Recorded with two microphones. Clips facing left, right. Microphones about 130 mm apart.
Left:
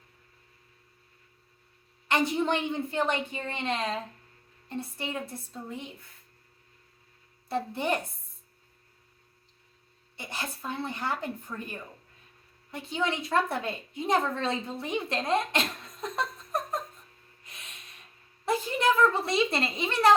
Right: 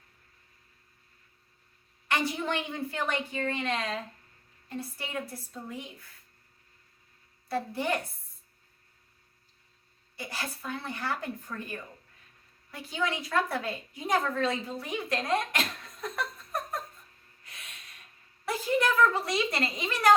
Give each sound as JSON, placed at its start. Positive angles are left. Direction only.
{"t": 2.0, "sound": "a woman's voice", "side_deg": 20}
{"t": 7.4, "sound": "a woman's voice", "side_deg": 25}
{"t": 10.2, "sound": "a woman's voice", "side_deg": 20}
{"t": 12.7, "sound": "a woman's voice", "side_deg": 25}
{"t": 17.4, "sound": "snort", "side_deg": 20}
{"t": 18.4, "sound": "a woman's voice", "side_deg": 25}